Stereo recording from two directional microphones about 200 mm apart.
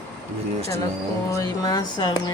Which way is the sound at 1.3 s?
20° left (ahead or behind).